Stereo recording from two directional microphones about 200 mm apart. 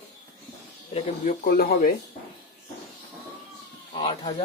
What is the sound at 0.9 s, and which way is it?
Speech, 45° left (ahead or behind).